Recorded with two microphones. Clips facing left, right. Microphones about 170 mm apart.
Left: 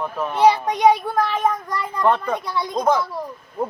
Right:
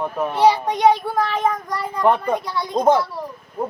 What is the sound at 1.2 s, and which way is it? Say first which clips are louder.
Speech: even; 5° left (ahead or behind).